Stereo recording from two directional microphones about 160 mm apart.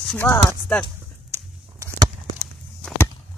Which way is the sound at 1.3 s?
20° right (ahead or behind).